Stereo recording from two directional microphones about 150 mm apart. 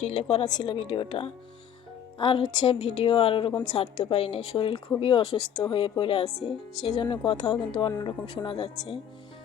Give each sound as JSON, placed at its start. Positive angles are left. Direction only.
{"t": 0.0, "sound": "a woman's voice", "side_deg": 45}
{"t": 0.4, "sound": "speech", "side_deg": 30}